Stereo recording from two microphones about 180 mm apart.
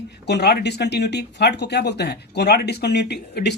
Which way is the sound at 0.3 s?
65° left (ahead or behind).